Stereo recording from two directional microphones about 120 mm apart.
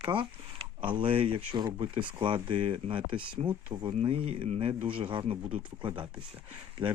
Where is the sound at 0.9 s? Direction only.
45° right (ahead or behind).